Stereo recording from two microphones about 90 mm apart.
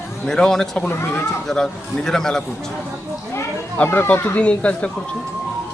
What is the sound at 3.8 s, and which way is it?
Speech, 20° left (ahead or behind).